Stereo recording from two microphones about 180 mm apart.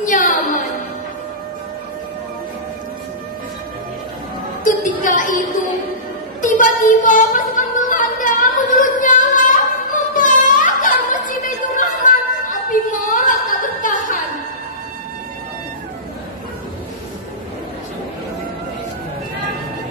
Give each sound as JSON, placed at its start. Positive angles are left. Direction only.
{"t": 0.0, "sound": "music", "side_deg": 45}
{"t": 4.6, "sound": "music", "side_deg": 45}
{"t": 6.4, "sound": "a sound", "side_deg": 45}